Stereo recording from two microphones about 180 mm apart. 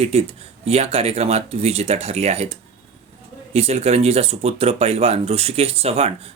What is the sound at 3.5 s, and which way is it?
Speech, 35° right (ahead or behind).